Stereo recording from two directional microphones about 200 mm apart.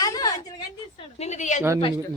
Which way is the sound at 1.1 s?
35° left (ahead or behind).